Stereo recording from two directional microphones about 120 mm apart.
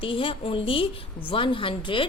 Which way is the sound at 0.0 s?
45° left (ahead or behind).